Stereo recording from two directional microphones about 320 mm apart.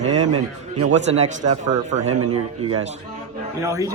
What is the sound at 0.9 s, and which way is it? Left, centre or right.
Speech, right.